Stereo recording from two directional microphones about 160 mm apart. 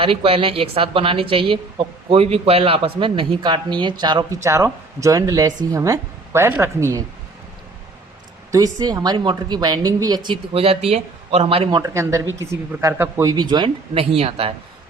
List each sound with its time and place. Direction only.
0.0 s a woman's voice: 35° right (ahead or behind); by 7.0 s 20° right (ahead or behind)
8.5 s speech: 25° right (ahead or behind)
10.5 s a woman's voice: 40° right (ahead or behind)
11.8 s speech: 20° right (ahead or behind); by 14.5 s 35° right (ahead or behind)